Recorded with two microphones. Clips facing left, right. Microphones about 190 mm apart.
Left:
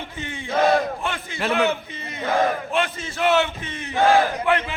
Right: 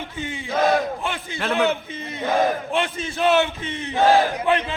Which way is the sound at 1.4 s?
10° left (ahead or behind).